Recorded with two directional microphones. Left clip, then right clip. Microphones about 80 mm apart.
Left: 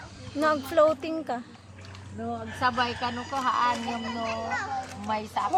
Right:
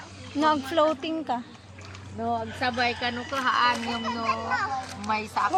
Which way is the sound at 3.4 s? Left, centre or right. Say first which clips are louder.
Right 2 dB; centre.